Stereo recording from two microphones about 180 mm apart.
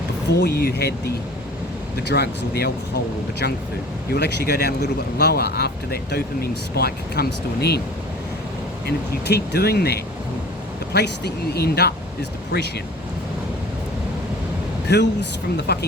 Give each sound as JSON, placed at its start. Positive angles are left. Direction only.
{"t": 0.3, "sound": "speech", "side_deg": 65}
{"t": 4.1, "sound": "speech", "side_deg": 65}
{"t": 8.9, "sound": "speech", "side_deg": 65}
{"t": 14.8, "sound": "speech", "side_deg": 70}